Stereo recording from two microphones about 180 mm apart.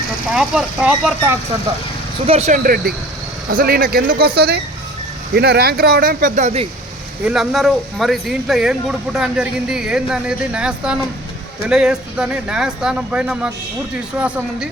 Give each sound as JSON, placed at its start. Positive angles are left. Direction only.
{"t": 0.3, "sound": "speech", "side_deg": -5}
{"t": 2.2, "sound": "speech", "side_deg": -35}
{"t": 2.6, "sound": "speech", "side_deg": -55}
{"t": 7.3, "sound": "speech", "side_deg": 0}